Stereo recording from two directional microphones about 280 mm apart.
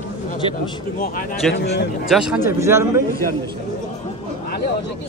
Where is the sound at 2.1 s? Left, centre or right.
Centre.